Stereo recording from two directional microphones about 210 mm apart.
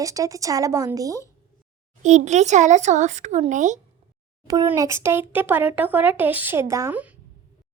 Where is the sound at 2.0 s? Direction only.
35° right (ahead or behind).